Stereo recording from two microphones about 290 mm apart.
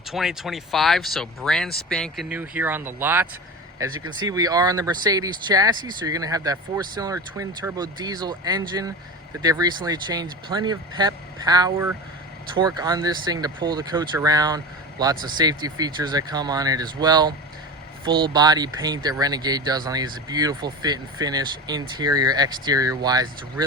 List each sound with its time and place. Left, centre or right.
0.1 s speech: centre